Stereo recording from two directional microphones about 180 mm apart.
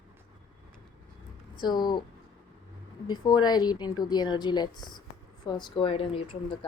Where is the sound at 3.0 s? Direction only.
25° left (ahead or behind).